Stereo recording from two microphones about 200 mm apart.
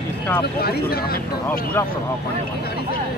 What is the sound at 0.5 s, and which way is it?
Speech, 50° left (ahead or behind).